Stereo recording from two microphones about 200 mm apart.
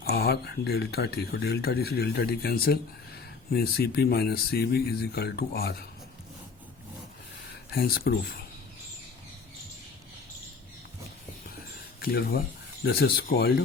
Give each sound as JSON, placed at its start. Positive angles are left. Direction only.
{"t": 0.0, "sound": "speech", "side_deg": 50}
{"t": 7.7, "sound": "speech", "side_deg": 50}
{"t": 11.9, "sound": "speech", "side_deg": 50}